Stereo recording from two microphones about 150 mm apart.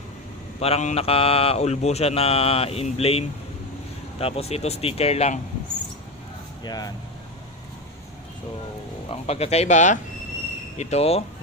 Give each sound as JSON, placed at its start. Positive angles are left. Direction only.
{"t": 0.6, "sound": "mantra", "side_deg": 45}
{"t": 4.2, "sound": "speech", "side_deg": 40}
{"t": 6.7, "sound": "speech", "side_deg": 25}
{"t": 9.0, "sound": "speech", "side_deg": 45}